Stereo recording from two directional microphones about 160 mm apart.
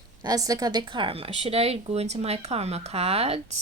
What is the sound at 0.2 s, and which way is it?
A woman's voice, 20° right (ahead or behind).